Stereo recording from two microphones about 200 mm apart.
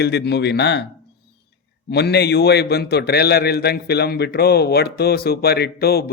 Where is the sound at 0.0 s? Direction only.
55° left (ahead or behind).